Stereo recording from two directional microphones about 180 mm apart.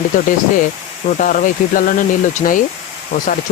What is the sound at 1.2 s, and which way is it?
Speech, 50° left (ahead or behind).